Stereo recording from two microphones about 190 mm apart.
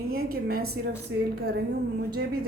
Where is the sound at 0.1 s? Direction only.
55° right (ahead or behind).